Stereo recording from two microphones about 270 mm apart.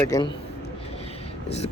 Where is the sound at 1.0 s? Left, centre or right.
Left.